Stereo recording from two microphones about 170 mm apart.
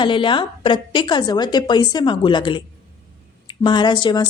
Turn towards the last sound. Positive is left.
turn(degrees=25)  # may be behind; listen again after turning